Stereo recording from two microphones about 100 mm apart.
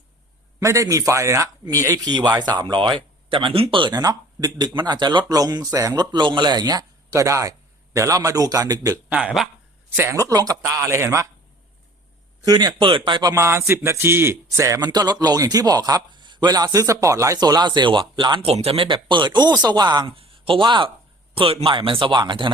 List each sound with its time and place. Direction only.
0.6 s a man's voice: 30° right (ahead or behind)
2.1 s speech: 45° right (ahead or behind)
3.9 s speech: 40° right (ahead or behind)
7.1 s a man's voice: 30° right (ahead or behind)
9.0 s speech: 10° right (ahead or behind)
10.1 s a man's voice: 35° right (ahead or behind)
10.6 s speech: 20° right (ahead or behind)
12.5 s speech: 45° right (ahead or behind)
13.3 s speech: 25° right (ahead or behind)
14.8 s a man's voice: 45° right (ahead or behind)
18.4 s speech: 90° right
18.9 s speech: 55° right (ahead or behind)
20.1 s speech: 65° right (ahead or behind)
21.3 s speech: 65° right (ahead or behind)